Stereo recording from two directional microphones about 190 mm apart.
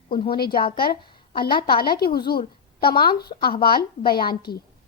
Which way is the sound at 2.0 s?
55° left (ahead or behind).